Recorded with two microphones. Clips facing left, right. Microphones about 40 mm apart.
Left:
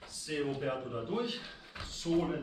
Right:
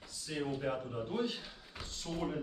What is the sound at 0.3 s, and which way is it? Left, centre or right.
Speech, centre.